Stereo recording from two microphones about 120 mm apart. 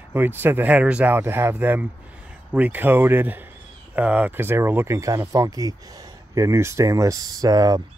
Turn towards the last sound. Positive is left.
turn(degrees=-35)  # may be behind; listen again after turning